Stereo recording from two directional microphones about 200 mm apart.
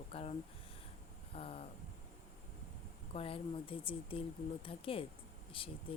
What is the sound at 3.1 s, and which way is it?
Speech, 30° left (ahead or behind).